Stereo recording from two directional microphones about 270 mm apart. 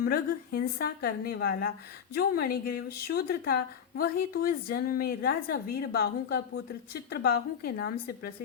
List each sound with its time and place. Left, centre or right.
0.0 s a woman's voice: left